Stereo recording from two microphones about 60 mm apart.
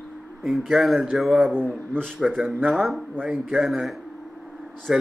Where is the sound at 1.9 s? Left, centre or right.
Centre.